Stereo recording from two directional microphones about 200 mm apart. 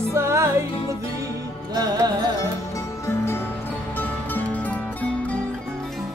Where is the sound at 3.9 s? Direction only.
10° left (ahead or behind).